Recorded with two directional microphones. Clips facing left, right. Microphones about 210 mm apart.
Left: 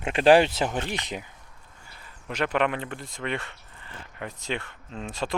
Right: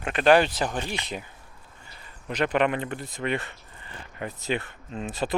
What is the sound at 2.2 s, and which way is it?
Speech, centre (ahead or behind).